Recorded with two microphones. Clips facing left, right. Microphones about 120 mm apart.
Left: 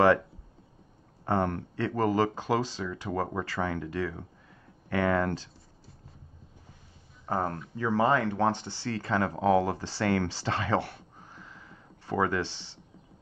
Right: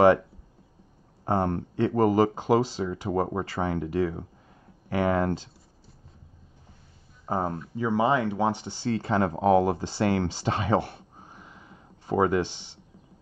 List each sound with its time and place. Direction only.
1.2 s speech: 20° right (ahead or behind)
7.2 s speech: 15° right (ahead or behind)